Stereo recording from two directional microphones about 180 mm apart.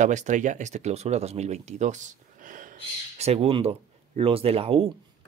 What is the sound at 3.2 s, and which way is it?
Speech, 35° right (ahead or behind).